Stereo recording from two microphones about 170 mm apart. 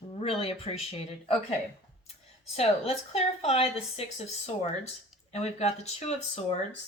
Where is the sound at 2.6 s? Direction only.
35° left (ahead or behind).